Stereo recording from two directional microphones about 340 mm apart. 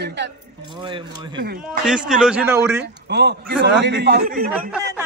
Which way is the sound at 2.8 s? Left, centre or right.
Right.